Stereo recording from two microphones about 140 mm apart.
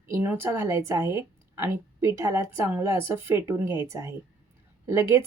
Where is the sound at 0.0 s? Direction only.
15° right (ahead or behind).